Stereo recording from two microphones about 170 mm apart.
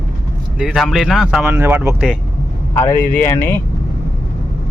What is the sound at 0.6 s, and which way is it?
Speech, 5° right (ahead or behind).